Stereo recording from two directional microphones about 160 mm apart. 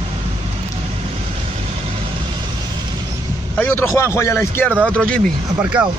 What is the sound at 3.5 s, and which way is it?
A man's voice, 15° left (ahead or behind).